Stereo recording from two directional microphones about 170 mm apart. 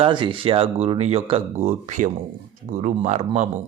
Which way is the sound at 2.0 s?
50° right (ahead or behind).